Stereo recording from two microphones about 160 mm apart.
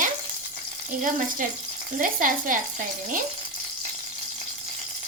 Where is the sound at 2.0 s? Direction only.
55° right (ahead or behind).